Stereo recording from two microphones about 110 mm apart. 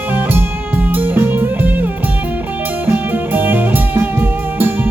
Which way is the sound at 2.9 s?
15° right (ahead or behind).